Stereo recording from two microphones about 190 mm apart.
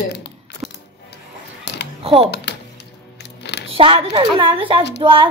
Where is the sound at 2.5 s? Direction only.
60° left (ahead or behind).